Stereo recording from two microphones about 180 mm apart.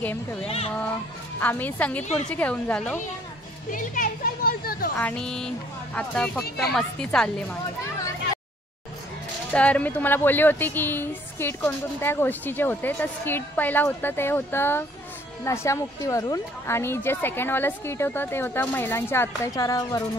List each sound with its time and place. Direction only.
0.0 s speech: 10° left (ahead or behind)
1.4 s speech: 10° left (ahead or behind)
3.7 s children playing: 50° left (ahead or behind)
4.9 s a woman's voice: 5° left (ahead or behind)
9.5 s speech: 5° left (ahead or behind)